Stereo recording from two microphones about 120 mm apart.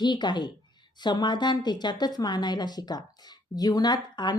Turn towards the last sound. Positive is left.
turn(degrees=35)  # may be behind; listen again after turning